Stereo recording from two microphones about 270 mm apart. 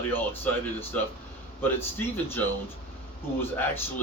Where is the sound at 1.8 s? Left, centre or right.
Centre.